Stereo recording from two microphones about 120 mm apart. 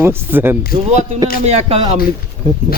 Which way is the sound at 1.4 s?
55° right (ahead or behind).